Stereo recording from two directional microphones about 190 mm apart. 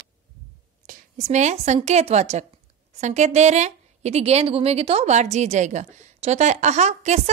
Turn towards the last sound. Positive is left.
turn(degrees=-35)  # may be behind; listen again after turning